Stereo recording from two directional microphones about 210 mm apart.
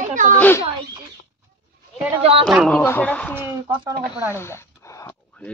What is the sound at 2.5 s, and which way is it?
Speech, centre (ahead or behind).